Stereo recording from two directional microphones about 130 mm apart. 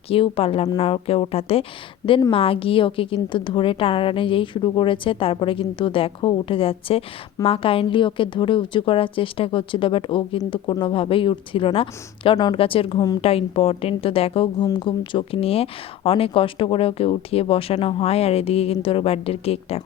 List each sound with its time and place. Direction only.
0.1 s a woman's voice: 45° left (ahead or behind)